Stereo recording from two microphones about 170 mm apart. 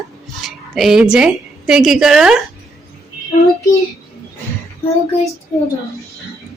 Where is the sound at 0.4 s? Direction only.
Centre (ahead or behind).